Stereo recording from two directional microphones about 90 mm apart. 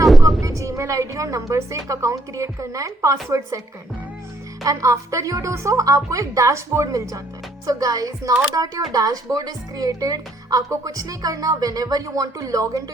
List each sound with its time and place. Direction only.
0.4 s speech: 35° right (ahead or behind)
4.6 s speech: 40° right (ahead or behind)